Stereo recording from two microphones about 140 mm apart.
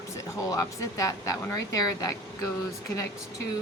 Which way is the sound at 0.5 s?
25° left (ahead or behind).